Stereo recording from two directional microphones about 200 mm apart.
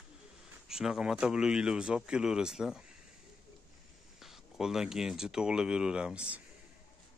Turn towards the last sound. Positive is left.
turn(degrees=-5)  # may be behind; listen again after turning